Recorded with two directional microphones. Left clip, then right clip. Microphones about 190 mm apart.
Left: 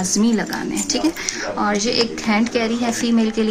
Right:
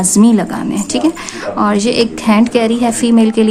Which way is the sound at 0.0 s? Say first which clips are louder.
Right 8 dB; 50° right (ahead or behind).